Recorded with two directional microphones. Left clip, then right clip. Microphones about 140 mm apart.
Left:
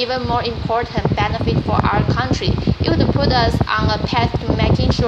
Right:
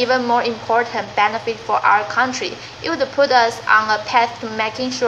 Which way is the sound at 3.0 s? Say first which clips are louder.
Right 5 dB; 45° left (ahead or behind).